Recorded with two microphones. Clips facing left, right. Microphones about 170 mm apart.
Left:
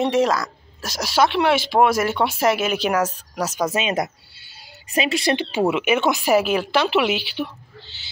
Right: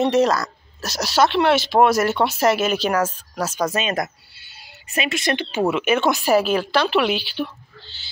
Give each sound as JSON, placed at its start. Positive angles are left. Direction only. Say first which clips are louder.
{"t": 0.0, "sound": "speech", "louder": "right 1 dB", "side_deg": 10}
{"t": 4.9, "sound": "speech", "louder": "left 3 dB", "side_deg": 30}
{"t": 5.4, "sound": "speech", "louder": "left 1 dB", "side_deg": 15}